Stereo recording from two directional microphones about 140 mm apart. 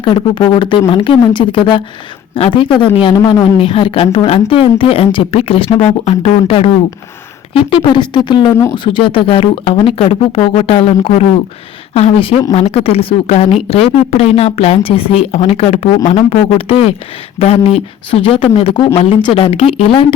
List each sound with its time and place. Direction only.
0.0 s speech: 35° left (ahead or behind)
3.2 s a woman's voice: 20° left (ahead or behind)
3.6 s a woman's voice: 40° left (ahead or behind)